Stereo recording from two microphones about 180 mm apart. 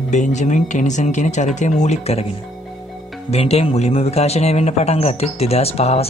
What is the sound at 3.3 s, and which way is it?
A man's voice, 35° left (ahead or behind).